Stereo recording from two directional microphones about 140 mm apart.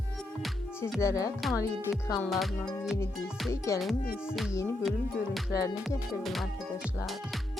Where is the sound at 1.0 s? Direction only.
25° left (ahead or behind).